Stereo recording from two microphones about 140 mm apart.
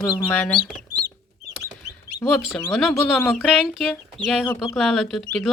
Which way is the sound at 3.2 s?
15° left (ahead or behind).